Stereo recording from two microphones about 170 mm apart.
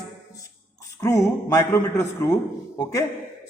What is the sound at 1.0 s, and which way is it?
A man's voice, 20° left (ahead or behind).